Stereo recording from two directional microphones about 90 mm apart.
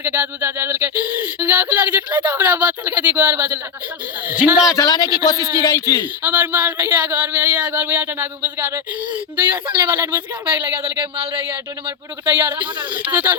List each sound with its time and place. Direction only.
0.0 s a man's voice: 20° right (ahead or behind)
4.7 s speech: 45° left (ahead or behind)
5.4 s speech: 35° right (ahead or behind)
5.6 s speech: 45° left (ahead or behind)
6.2 s speech: 20° right (ahead or behind)
12.2 s speech: 25° right (ahead or behind)